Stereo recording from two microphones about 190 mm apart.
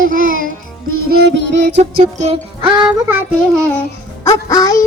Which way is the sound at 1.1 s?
65° right (ahead or behind).